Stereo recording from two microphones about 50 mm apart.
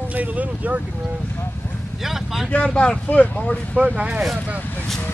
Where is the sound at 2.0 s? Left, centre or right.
Centre.